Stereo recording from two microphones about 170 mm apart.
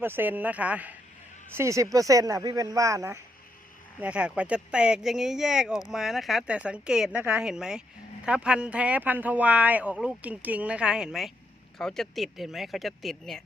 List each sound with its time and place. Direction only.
0.0 s speech: 10° right (ahead or behind)
4.0 s speech: 5° right (ahead or behind)